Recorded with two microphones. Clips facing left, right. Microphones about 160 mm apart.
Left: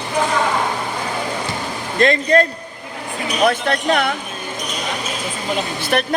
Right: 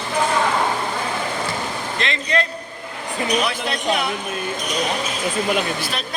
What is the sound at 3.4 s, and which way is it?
Speech, 55° left (ahead or behind).